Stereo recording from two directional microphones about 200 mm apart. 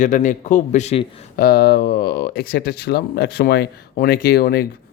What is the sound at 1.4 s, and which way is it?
Speech, 50° left (ahead or behind).